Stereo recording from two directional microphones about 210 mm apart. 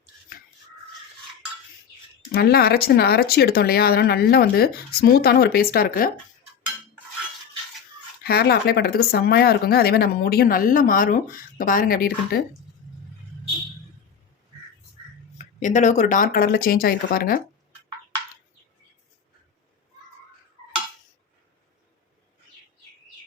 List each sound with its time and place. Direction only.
2.3 s speech: 50° left (ahead or behind)
8.2 s speech: 50° left (ahead or behind)
15.6 s speech: 35° left (ahead or behind)